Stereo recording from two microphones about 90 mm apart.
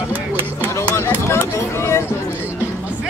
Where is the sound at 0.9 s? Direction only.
30° left (ahead or behind).